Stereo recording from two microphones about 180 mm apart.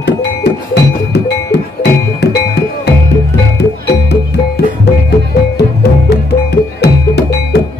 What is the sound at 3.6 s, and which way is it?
Music, 65° left (ahead or behind).